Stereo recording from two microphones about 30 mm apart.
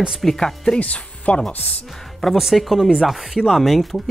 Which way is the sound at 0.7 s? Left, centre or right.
Left.